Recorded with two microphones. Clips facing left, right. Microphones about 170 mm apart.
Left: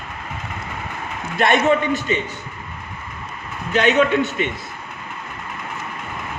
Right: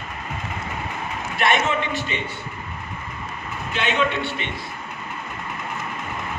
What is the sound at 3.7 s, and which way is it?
Speech, 45° left (ahead or behind).